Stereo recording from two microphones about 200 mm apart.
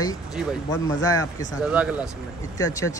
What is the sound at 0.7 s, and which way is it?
Speech, 20° left (ahead or behind).